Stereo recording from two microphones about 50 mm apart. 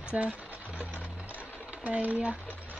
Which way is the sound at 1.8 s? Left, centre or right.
Right.